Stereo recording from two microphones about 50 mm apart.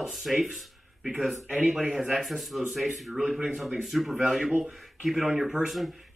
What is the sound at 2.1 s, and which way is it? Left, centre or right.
Speech, centre.